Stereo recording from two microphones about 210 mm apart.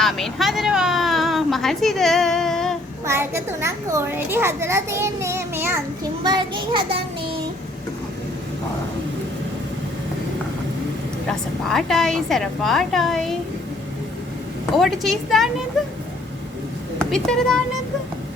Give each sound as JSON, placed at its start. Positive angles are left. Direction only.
{"t": 0.0, "sound": "a woman's voice", "side_deg": 0}
{"t": 3.1, "sound": "a child's voice", "side_deg": -10}
{"t": 11.3, "sound": "a woman's voice", "side_deg": 0}
{"t": 14.8, "sound": "a woman's voice", "side_deg": 0}
{"t": 17.0, "sound": "speech", "side_deg": 5}